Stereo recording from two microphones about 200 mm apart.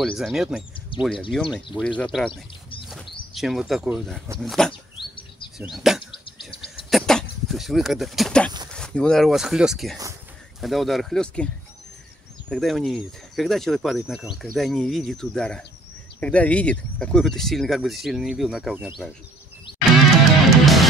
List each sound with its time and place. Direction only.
0.0 s speech: centre (ahead or behind)
0.9 s speech: 25° left (ahead or behind)
1.3 s speech: centre (ahead or behind)
2.9 s bird: centre (ahead or behind)
4.4 s speech: 5° left (ahead or behind)
6.2 s cricket: 25° left (ahead or behind)
6.9 s a sound: centre (ahead or behind)
8.7 s speech: 5° left (ahead or behind)
20.4 s music: centre (ahead or behind)